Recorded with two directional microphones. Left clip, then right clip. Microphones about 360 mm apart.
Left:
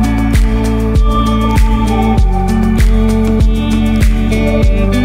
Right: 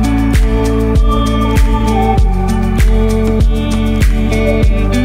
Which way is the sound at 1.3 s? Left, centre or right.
Centre.